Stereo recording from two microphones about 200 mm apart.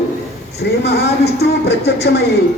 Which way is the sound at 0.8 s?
55° left (ahead or behind).